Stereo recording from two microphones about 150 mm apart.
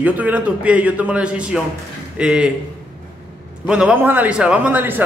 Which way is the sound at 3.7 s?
5° right (ahead or behind).